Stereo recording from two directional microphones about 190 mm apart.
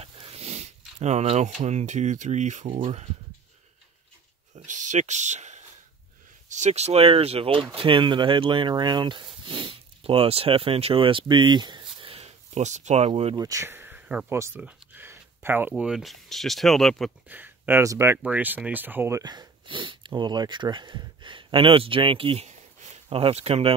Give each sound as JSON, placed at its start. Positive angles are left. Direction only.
{"t": 0.0, "sound": "speech", "side_deg": -30}
{"t": 4.6, "sound": "a sound", "side_deg": -40}
{"t": 6.5, "sound": "speech", "side_deg": -35}
{"t": 13.4, "sound": "speech", "side_deg": -15}
{"t": 17.3, "sound": "speech", "side_deg": -10}